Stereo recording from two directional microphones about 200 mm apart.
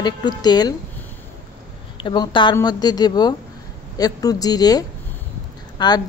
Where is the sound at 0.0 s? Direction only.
20° left (ahead or behind).